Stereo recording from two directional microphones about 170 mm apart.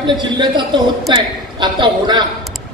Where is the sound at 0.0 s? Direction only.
25° right (ahead or behind).